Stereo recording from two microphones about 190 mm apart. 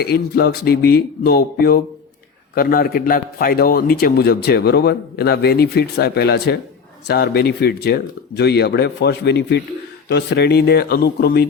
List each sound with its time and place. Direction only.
0.0 s a man's voice: 55° left (ahead or behind)